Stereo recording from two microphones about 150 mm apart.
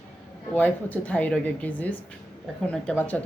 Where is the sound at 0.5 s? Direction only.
10° left (ahead or behind).